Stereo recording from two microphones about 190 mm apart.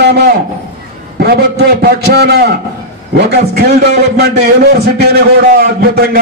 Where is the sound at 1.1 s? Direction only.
55° right (ahead or behind).